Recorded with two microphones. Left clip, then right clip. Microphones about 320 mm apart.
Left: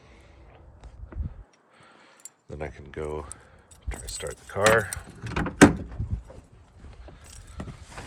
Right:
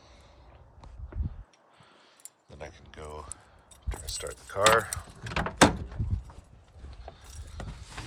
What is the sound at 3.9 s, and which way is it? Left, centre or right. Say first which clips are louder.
Keys jangling: left 2 dB; centre.